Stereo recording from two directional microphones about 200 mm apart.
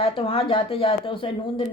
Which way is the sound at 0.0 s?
30° left (ahead or behind).